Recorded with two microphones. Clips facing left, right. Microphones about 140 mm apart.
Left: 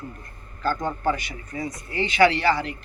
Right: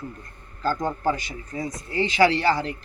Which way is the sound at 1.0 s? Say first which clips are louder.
Even; 30° right (ahead or behind).